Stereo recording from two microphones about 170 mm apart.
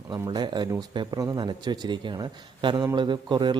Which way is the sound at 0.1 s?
25° right (ahead or behind).